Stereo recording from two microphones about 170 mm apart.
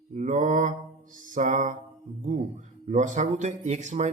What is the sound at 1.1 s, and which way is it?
Speech, 50° right (ahead or behind).